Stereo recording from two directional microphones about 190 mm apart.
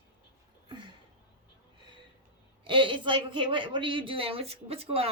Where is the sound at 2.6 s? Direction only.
25° right (ahead or behind).